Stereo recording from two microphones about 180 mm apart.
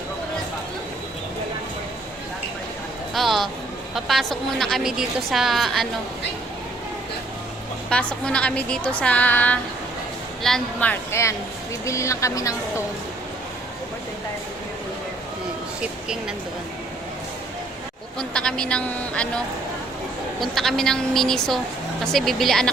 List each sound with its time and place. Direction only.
3.2 s a woman's voice: centre (ahead or behind)
7.9 s a woman's voice: 5° left (ahead or behind)
15.8 s speech: 5° right (ahead or behind)
18.2 s a woman's voice: 5° left (ahead or behind)
20.4 s a woman's voice: centre (ahead or behind)